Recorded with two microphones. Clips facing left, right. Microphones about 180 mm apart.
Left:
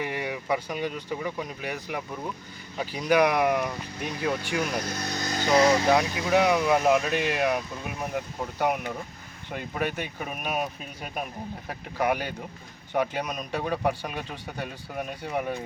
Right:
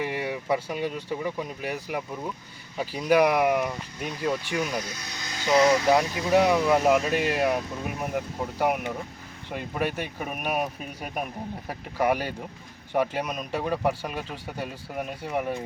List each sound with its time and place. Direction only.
0.0 s speech: centre (ahead or behind)
4.8 s speech: 55° left (ahead or behind)
5.9 s speech: 5° right (ahead or behind)
6.4 s speech: 5° left (ahead or behind)